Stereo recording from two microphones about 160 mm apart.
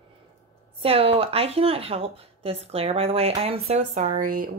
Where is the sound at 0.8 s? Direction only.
35° right (ahead or behind).